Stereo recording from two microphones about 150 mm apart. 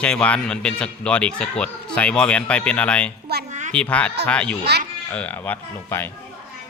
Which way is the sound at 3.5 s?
55° right (ahead or behind).